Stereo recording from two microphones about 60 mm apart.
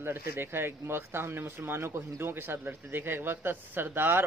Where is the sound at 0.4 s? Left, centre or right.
Right.